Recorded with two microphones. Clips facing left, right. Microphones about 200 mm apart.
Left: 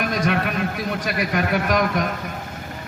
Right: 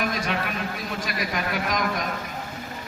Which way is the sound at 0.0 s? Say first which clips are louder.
Left 5 dB; 55° left (ahead or behind).